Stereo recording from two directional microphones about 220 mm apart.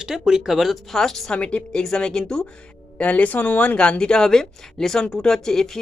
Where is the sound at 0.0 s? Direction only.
Centre (ahead or behind).